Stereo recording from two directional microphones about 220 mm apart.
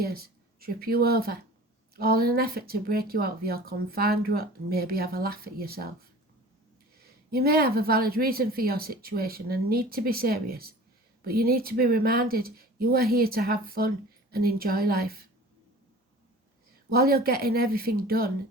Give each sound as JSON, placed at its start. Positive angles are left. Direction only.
{"t": 0.0, "sound": "speech", "side_deg": -45}
{"t": 7.0, "sound": "speech", "side_deg": -45}
{"t": 16.9, "sound": "speech", "side_deg": -45}